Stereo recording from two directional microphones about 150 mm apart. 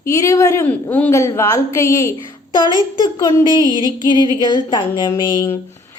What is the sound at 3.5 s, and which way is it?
Music, 25° right (ahead or behind).